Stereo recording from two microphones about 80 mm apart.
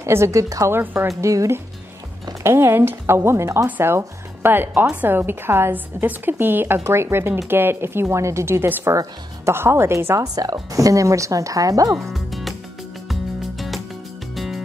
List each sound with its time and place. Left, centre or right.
0.0 s a woman's voice: right
10.2 s speech: right
12.0 s music: centre